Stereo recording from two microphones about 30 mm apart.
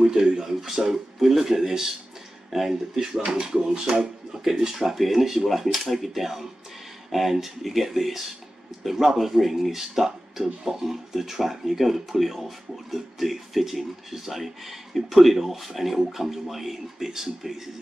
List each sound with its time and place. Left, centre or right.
0.0 s a sound: centre
0.4 s speech: centre
4.7 s speech: centre